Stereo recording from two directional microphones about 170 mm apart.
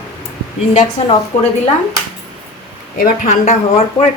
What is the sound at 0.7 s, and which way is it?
Speech, 45° left (ahead or behind).